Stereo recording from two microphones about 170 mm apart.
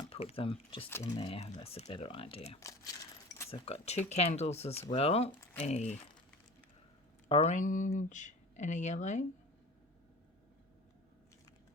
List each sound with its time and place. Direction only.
0.1 s speech: 35° left (ahead or behind)
2.6 s speech: 20° left (ahead or behind)
3.5 s speech: 40° left (ahead or behind)
7.3 s speech: 35° left (ahead or behind)